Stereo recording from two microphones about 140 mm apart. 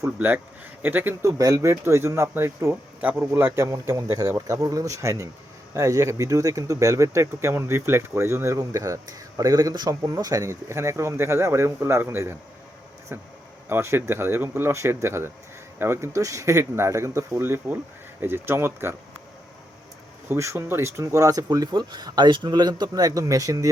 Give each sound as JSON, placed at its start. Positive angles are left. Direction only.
{"t": 0.0, "sound": "speech", "side_deg": -15}
{"t": 20.3, "sound": "speech", "side_deg": -20}